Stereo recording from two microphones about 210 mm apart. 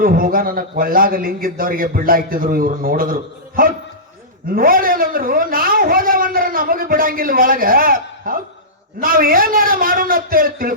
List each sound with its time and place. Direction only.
0.0 s a man's voice: 45° right (ahead or behind)